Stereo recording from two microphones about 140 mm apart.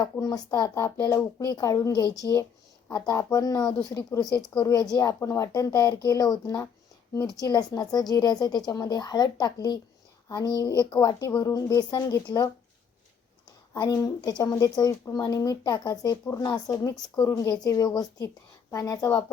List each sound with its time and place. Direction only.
0.0 s a woman's voice: 25° left (ahead or behind)
13.7 s speech: 25° left (ahead or behind)